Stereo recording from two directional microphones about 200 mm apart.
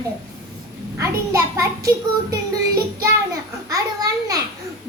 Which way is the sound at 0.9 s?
15° right (ahead or behind).